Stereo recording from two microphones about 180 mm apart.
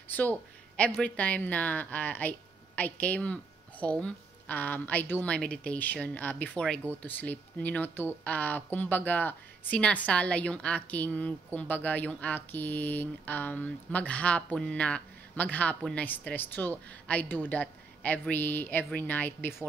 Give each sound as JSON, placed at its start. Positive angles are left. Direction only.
{"t": 0.7, "sound": "speech", "side_deg": 5}